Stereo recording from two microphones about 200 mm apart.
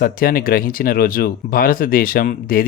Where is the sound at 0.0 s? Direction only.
45° left (ahead or behind).